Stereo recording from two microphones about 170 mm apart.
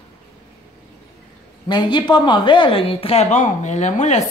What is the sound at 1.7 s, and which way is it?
Speech, 25° left (ahead or behind).